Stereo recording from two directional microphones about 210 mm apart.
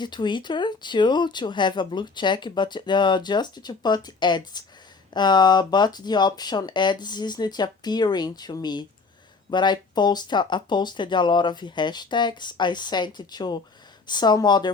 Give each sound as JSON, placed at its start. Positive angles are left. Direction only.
{"t": 0.0, "sound": "speech", "side_deg": 20}